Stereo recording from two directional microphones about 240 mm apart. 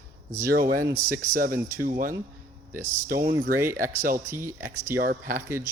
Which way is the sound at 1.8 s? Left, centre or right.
Right.